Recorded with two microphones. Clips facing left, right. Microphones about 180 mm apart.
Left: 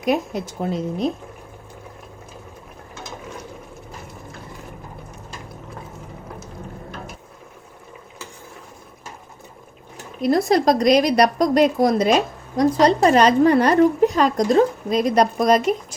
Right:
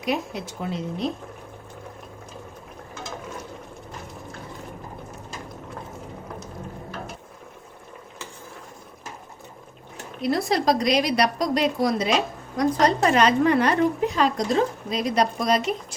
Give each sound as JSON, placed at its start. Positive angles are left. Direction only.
{"t": 0.0, "sound": "a woman's voice", "side_deg": 45}
{"t": 10.2, "sound": "a woman's voice", "side_deg": 45}